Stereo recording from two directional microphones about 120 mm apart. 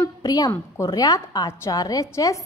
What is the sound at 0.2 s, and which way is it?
A woman's voice, 30° left (ahead or behind).